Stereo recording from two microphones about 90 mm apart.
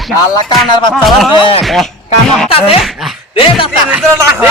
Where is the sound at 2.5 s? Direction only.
90° left.